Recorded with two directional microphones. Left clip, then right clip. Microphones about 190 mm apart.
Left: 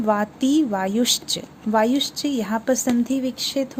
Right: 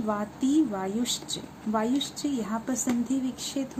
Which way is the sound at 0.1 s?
50° left (ahead or behind).